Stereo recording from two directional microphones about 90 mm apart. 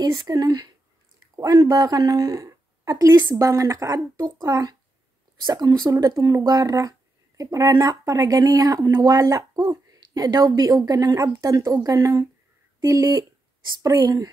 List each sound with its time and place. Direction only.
0.0 s a woman's voice: 45° right (ahead or behind)